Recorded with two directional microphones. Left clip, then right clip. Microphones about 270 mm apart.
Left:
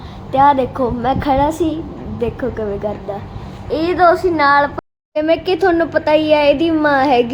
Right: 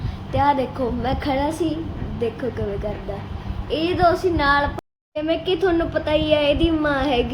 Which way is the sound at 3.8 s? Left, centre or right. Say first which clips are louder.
Left 6 dB; centre.